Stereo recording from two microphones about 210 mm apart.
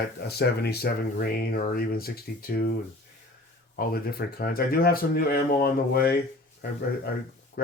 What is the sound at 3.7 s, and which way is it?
Speech, 45° left (ahead or behind).